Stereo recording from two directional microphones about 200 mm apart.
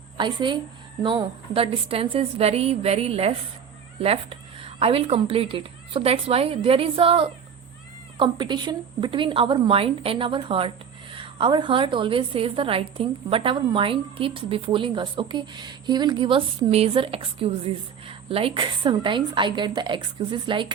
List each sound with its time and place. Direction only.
0.2 s a woman's voice: 25° right (ahead or behind)